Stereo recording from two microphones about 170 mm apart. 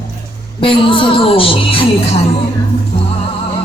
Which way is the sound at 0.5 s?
30° left (ahead or behind).